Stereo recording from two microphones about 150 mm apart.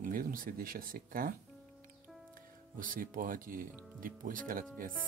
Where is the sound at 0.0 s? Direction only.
70° right (ahead or behind).